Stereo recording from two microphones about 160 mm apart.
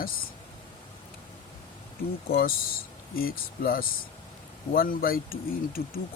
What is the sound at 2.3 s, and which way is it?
Speech, 65° left (ahead or behind).